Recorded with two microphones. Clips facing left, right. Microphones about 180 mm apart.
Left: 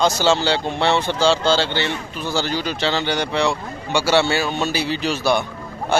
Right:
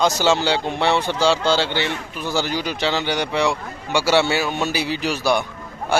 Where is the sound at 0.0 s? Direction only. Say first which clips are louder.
Left 1 dB; 15° right (ahead or behind).